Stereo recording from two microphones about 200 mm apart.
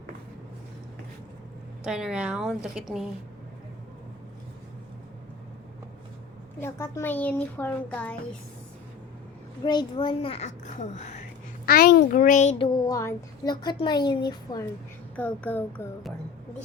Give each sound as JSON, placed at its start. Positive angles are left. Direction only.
{"t": 1.8, "sound": "a woman's voice", "side_deg": -5}
{"t": 6.6, "sound": "a woman's voice", "side_deg": 10}
{"t": 9.6, "sound": "a woman's voice", "side_deg": 20}
{"t": 15.1, "sound": "a woman's voice", "side_deg": 10}